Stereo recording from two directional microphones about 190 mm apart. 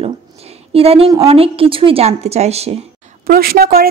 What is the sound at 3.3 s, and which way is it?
Speech, 50° right (ahead or behind).